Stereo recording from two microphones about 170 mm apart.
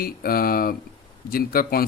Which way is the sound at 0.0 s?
60° left (ahead or behind).